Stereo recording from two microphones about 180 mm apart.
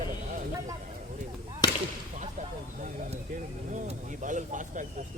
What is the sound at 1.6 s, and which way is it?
Whip, 20° left (ahead or behind).